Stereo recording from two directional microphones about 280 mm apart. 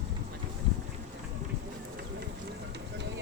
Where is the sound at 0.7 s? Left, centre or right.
Right.